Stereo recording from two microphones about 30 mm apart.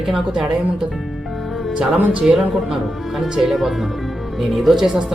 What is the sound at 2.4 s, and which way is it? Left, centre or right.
Speech, centre.